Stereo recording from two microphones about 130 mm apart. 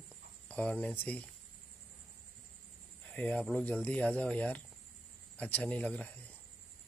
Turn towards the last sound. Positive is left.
turn(degrees=10)  # may be behind; listen again after turning